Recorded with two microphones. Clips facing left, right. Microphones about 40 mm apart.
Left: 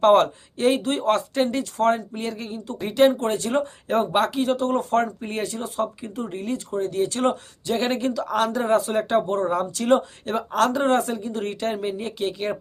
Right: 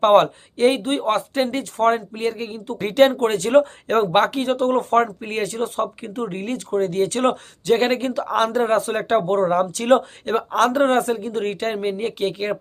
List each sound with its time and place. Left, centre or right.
0.0 s speech: right